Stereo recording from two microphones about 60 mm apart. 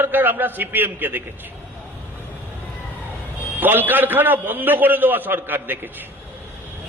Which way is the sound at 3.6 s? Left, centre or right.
Right.